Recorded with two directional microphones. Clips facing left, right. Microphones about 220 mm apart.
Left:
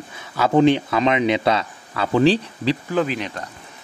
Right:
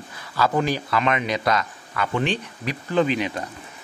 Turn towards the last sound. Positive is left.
turn(degrees=0)  # may be behind; listen again after turning